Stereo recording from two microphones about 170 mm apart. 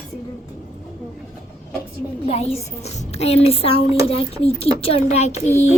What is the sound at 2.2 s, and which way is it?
A child's voice, 35° left (ahead or behind).